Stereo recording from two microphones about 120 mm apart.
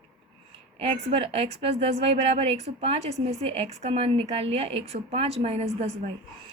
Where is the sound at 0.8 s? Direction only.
55° right (ahead or behind).